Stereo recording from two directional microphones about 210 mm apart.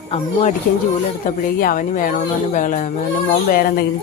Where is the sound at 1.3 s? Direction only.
40° left (ahead or behind).